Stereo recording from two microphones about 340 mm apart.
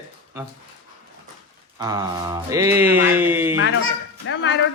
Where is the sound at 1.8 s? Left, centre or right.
Centre.